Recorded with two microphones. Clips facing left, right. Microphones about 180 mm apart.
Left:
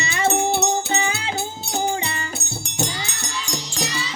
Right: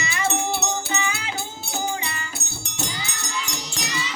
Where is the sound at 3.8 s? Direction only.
35° left (ahead or behind).